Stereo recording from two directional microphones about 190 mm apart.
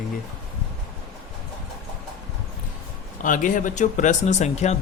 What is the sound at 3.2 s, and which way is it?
Speech, 45° left (ahead or behind).